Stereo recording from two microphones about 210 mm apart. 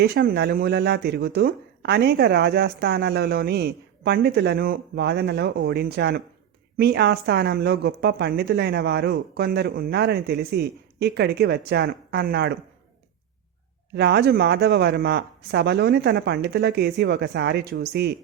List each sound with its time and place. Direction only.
0.0 s speech: 50° right (ahead or behind)
13.9 s speech: 50° right (ahead or behind)